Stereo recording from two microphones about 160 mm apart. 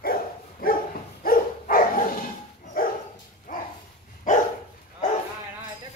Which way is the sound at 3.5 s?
55° left (ahead or behind).